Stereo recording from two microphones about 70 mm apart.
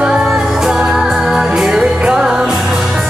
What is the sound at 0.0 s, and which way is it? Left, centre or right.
Music, centre.